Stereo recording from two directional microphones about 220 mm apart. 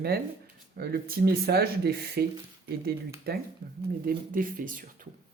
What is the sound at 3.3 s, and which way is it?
Speech, 45° right (ahead or behind).